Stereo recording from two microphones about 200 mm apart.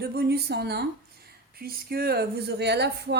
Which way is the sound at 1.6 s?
50° right (ahead or behind).